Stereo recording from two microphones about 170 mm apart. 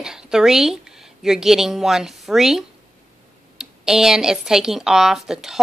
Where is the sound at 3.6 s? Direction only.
5° right (ahead or behind).